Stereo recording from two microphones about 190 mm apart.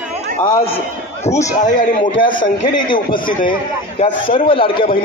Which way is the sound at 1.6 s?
40° left (ahead or behind).